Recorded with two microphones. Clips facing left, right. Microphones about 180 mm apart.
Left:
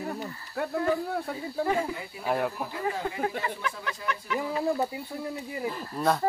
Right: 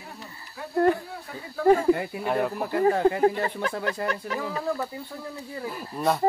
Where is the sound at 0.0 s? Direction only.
50° left (ahead or behind).